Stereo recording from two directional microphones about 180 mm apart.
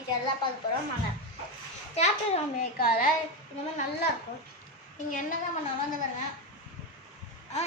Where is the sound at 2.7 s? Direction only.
55° left (ahead or behind).